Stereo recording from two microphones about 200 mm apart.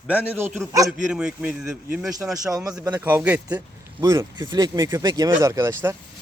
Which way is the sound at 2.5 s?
15° right (ahead or behind).